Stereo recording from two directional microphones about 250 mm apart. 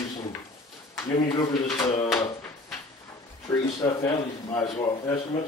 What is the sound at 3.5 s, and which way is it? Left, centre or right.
Speech, centre.